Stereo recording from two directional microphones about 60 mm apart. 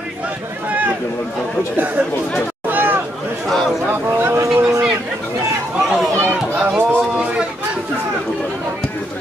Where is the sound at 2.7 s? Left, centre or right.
Right.